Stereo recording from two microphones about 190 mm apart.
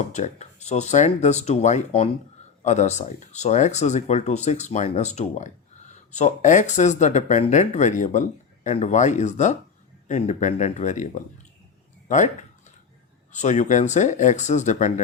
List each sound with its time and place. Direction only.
0.0 s speech: 35° left (ahead or behind)
12.0 s a sound: 40° left (ahead or behind)
13.3 s speech: 40° left (ahead or behind)